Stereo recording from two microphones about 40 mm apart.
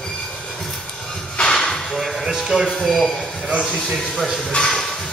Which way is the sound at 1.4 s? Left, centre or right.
Centre.